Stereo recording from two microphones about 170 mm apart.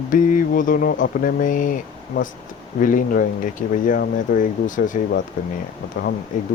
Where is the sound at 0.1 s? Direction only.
50° left (ahead or behind).